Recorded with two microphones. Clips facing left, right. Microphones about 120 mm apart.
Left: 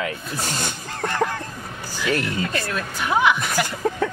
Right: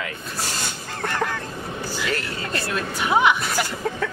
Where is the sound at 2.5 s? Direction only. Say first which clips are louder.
Even; 5° right (ahead or behind).